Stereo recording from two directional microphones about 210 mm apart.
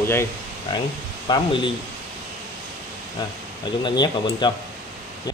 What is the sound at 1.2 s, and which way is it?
Speech, 20° left (ahead or behind).